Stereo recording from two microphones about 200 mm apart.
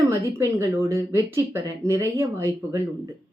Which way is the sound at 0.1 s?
15° right (ahead or behind).